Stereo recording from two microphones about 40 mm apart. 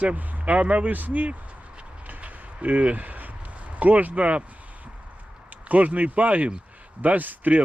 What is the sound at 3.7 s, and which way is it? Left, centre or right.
Speech, right.